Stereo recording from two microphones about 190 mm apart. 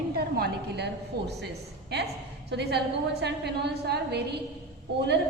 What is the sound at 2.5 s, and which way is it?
A man's voice, 60° right (ahead or behind).